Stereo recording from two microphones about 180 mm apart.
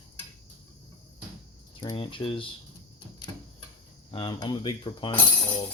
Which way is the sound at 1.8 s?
25° left (ahead or behind).